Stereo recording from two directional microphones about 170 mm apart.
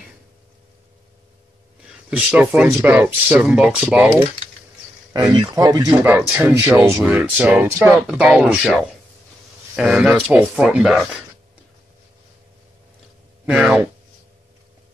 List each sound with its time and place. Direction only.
2.0 s speech: 5° right (ahead or behind)
5.1 s speech: 25° right (ahead or behind); by 11.1 s 5° right (ahead or behind)
13.5 s speech: 10° right (ahead or behind)